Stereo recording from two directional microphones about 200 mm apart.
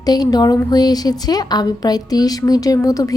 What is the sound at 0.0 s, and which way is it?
A woman's voice, 20° left (ahead or behind).